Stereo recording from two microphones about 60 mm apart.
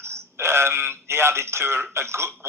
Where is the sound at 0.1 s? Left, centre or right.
Right.